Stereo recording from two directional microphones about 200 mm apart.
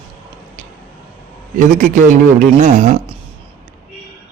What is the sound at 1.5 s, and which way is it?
A man's voice, 40° right (ahead or behind).